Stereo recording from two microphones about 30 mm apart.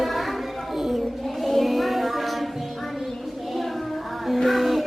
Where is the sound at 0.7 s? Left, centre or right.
Centre.